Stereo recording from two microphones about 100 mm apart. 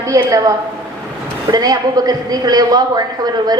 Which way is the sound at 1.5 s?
40° right (ahead or behind).